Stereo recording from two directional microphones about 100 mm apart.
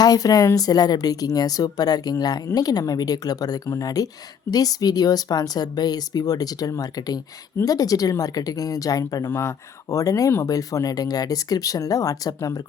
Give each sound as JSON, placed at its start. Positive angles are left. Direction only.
{"t": 0.0, "sound": "speech", "side_deg": 40}
{"t": 9.2, "sound": "speech", "side_deg": 25}